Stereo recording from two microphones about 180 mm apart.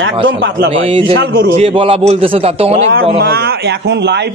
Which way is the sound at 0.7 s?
30° right (ahead or behind).